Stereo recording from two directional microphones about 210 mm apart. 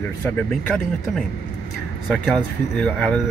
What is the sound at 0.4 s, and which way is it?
Speech, 5° left (ahead or behind).